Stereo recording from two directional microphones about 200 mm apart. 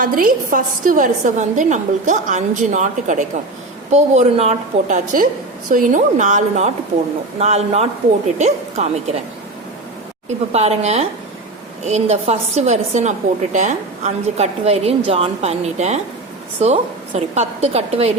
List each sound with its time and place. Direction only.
0.0 s a woman's voice: 45° right (ahead or behind)
10.5 s a woman's voice: 35° right (ahead or behind)